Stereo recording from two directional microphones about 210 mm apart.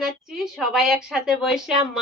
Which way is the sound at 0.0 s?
Centre (ahead or behind).